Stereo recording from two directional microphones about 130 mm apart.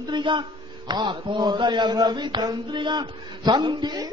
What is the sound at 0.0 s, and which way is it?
A man's voice, 35° right (ahead or behind).